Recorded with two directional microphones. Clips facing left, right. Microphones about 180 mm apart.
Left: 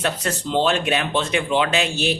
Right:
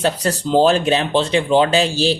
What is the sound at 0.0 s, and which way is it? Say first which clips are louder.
Speech: right 5 dB; 35° right (ahead or behind).